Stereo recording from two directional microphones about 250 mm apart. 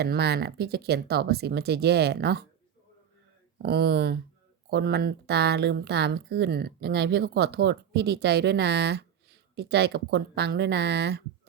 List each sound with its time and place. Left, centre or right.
0.0 s speech: right
3.6 s speech: right